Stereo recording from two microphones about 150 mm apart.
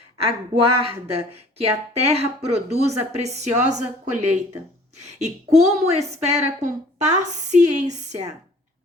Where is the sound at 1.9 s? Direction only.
45° right (ahead or behind).